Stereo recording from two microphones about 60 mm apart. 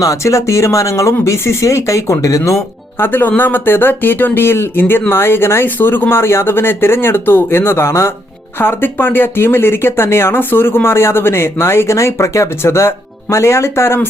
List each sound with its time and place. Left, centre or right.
0.0 s speech: left
3.0 s speech: left
8.5 s speech: left